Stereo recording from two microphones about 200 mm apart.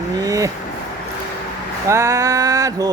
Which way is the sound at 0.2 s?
15° right (ahead or behind).